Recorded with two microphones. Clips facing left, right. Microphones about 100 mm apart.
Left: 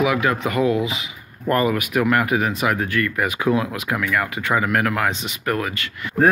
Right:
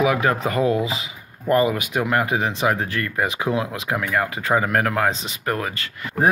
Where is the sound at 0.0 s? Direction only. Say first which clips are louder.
Even; 35° right (ahead or behind).